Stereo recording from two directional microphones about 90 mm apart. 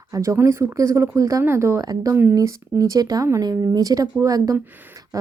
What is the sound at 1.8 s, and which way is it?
Speech, 40° right (ahead or behind).